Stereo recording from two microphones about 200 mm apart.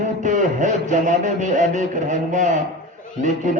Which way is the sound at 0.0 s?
40° right (ahead or behind).